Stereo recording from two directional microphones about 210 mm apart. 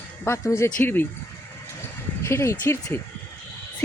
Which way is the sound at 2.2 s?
15° left (ahead or behind).